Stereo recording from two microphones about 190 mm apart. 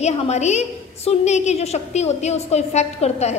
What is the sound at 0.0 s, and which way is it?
A woman's voice, 35° left (ahead or behind).